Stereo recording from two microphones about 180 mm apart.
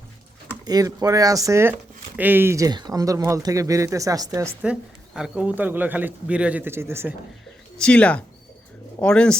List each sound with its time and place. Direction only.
0.6 s speech: 20° right (ahead or behind)
4.6 s speech: 5° right (ahead or behind)
7.8 s speech: 5° left (ahead or behind)